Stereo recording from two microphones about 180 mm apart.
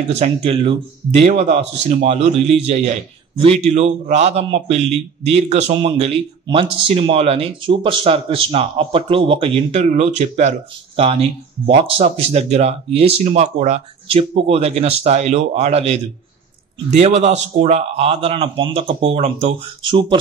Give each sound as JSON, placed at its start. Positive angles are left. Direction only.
{"t": 0.1, "sound": "speech", "side_deg": -35}